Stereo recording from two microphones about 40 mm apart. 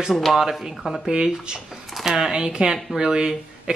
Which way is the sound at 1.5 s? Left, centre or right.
Right.